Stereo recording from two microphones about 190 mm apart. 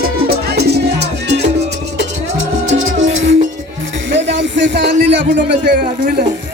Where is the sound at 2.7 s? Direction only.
90° right.